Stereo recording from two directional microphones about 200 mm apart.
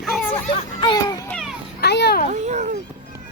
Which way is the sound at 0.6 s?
20° left (ahead or behind).